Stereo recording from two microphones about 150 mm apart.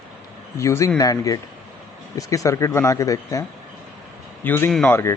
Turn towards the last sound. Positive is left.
turn(degrees=15)  # may be behind; listen again after turning